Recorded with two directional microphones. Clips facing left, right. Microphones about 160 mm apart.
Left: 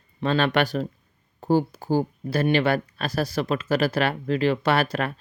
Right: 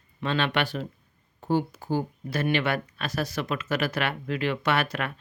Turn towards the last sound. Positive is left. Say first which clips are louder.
# left 5 dB
turn(degrees=35)  # may be behind; listen again after turning